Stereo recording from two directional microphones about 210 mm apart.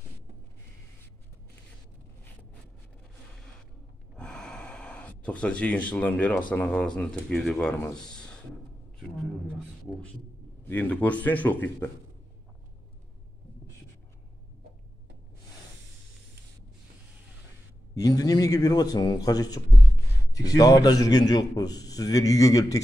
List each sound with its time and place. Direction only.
4.1 s gasp: 5° left (ahead or behind)
6.5 s speech: 5° left (ahead or behind)
10.6 s a man's voice: 10° left (ahead or behind)
17.9 s a man's voice: 15° left (ahead or behind)